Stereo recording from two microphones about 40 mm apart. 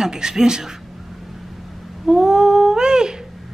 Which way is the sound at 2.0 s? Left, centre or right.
Centre.